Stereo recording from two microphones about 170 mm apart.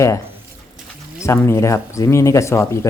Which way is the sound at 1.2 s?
15° left (ahead or behind).